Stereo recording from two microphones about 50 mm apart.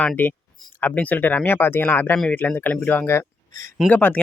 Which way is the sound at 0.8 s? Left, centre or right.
Left.